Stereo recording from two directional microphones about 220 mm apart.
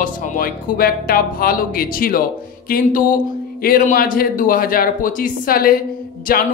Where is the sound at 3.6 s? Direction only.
40° left (ahead or behind).